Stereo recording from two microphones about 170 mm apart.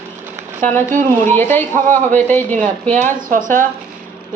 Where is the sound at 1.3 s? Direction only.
10° left (ahead or behind).